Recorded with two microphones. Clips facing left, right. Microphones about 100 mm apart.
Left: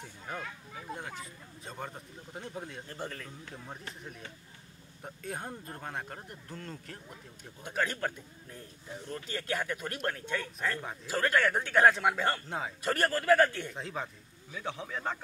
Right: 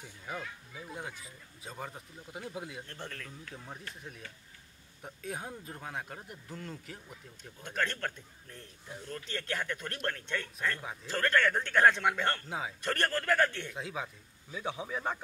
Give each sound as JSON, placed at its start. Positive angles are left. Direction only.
{"t": 0.9, "sound": "speech", "side_deg": -5}
{"t": 2.9, "sound": "a man's voice", "side_deg": 5}
{"t": 5.0, "sound": "speech", "side_deg": 0}
{"t": 7.6, "sound": "a man's voice", "side_deg": 5}
{"t": 14.5, "sound": "speech", "side_deg": -15}